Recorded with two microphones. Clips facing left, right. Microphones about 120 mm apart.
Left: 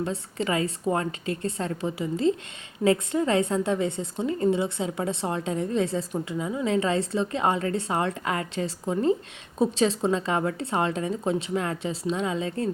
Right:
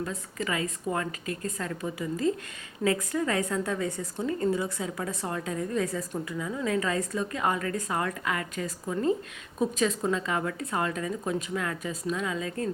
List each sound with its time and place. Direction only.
0.0 s a woman's voice: 30° left (ahead or behind)